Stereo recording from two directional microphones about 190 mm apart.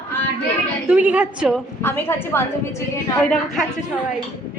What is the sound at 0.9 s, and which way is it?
Speech, 5° right (ahead or behind).